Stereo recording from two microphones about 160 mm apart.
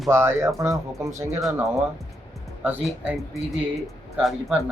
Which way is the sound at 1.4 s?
Centre (ahead or behind).